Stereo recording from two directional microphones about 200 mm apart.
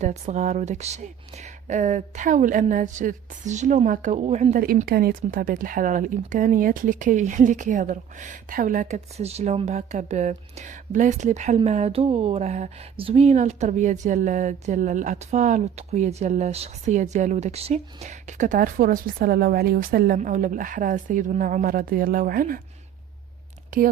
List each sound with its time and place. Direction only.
0.0 s speech: 35° right (ahead or behind)